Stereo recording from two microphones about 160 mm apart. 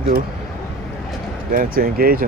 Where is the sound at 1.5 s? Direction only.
65° right (ahead or behind).